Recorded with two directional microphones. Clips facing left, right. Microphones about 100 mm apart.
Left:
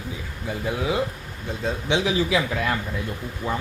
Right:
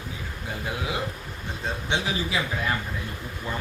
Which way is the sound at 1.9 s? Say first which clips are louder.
Left 6 dB; 90° left.